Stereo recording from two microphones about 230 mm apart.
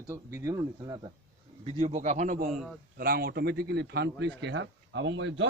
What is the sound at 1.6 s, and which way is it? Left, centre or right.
Speech, right.